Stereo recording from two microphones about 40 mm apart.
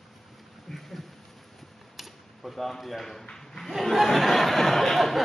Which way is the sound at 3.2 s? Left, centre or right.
Centre.